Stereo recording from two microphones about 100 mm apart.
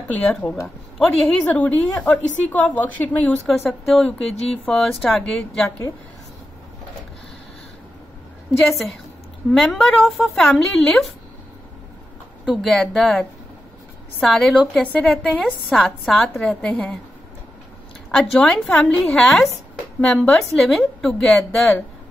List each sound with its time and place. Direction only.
0.1 s a woman's voice: 15° left (ahead or behind)
0.9 s speech: centre (ahead or behind)
1.4 s a woman's voice: 15° left (ahead or behind)
3.4 s speech: centre (ahead or behind)
8.5 s speech: centre (ahead or behind)
12.4 s speech: 5° left (ahead or behind)
18.1 s a woman's voice: 5° left (ahead or behind)